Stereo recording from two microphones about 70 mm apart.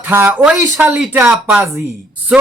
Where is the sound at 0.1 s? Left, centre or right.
Right.